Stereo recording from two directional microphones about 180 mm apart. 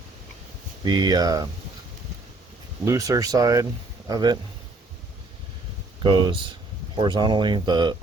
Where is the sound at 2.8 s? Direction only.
20° right (ahead or behind).